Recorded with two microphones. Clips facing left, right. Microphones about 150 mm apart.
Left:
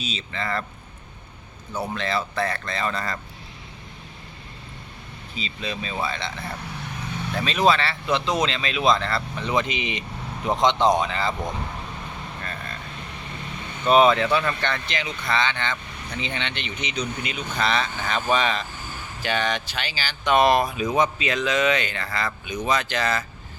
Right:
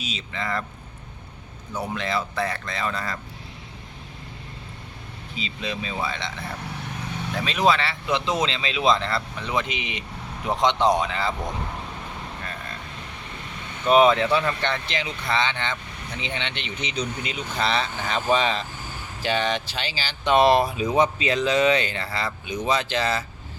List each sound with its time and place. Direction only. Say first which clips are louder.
0.0 s a man's voice: left 1 dB; 10° right (ahead or behind)
1.7 s a man's voice: left 1 dB; 5° left (ahead or behind)
2.0 s a man's voice: left 1 dB; 15° right (ahead or behind)
5.4 s a man's voice: even; 20° right (ahead or behind)
7.3 s a man's voice: left 1 dB; 15° right (ahead or behind)
9.5 s a man's voice: left 3 dB; 5° right (ahead or behind)
14.0 s a man's voice: even; 15° right (ahead or behind)